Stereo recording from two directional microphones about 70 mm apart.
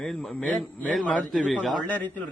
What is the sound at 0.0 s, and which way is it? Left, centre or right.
Speech, centre.